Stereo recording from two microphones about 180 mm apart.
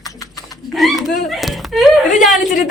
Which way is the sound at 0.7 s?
Centre (ahead or behind).